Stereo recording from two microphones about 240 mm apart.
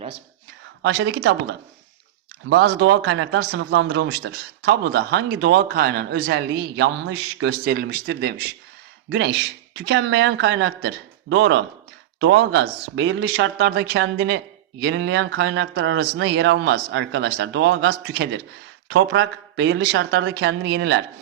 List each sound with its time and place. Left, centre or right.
0.8 s speech: right
2.5 s speech: right